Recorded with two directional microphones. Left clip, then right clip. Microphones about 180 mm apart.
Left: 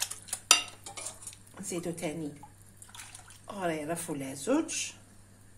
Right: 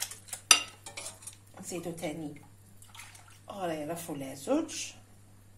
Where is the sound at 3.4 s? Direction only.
30° left (ahead or behind).